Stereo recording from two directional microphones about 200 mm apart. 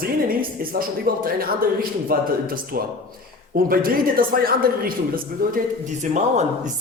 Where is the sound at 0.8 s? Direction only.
45° right (ahead or behind).